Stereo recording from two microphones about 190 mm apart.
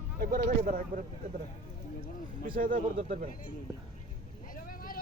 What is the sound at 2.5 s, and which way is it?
Speech, 50° right (ahead or behind).